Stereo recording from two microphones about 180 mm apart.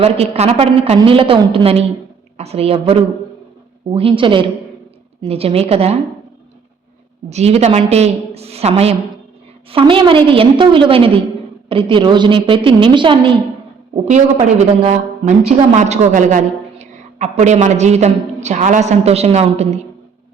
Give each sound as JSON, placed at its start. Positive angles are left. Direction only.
{"t": 0.0, "sound": "a woman's voice", "side_deg": -35}
{"t": 7.3, "sound": "a woman's voice", "side_deg": -35}
{"t": 13.9, "sound": "a woman's voice", "side_deg": -40}